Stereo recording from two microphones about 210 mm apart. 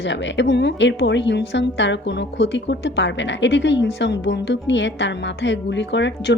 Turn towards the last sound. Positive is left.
turn(degrees=55)  # may be behind; listen again after turning